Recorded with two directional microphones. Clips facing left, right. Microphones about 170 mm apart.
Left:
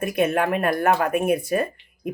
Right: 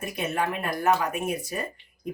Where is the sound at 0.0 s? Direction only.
60° left (ahead or behind).